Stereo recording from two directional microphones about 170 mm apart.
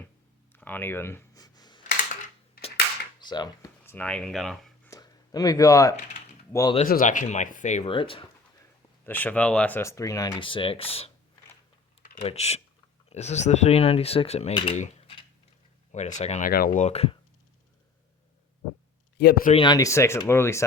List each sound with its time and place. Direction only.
0.5 s a sound: 10° left (ahead or behind)
3.2 s speech: 25° left (ahead or behind); by 4.9 s centre (ahead or behind)
4.9 s a sound: 20° left (ahead or behind)
6.5 s speech: 20° left (ahead or behind)
6.8 s speech: 55° left (ahead or behind)
7.9 s speech: 30° left (ahead or behind)
9.0 s speech: 10° left (ahead or behind)
10.4 s speech: 30° left (ahead or behind)
12.2 s speech: 40° left (ahead or behind)
16.5 s speech: 55° left (ahead or behind); by 17.2 s 35° left (ahead or behind)
19.1 s speech: 70° left (ahead or behind)
19.5 s speech: 25° left (ahead or behind)